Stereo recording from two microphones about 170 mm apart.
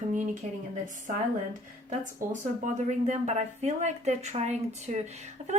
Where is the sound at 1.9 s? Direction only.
45° right (ahead or behind).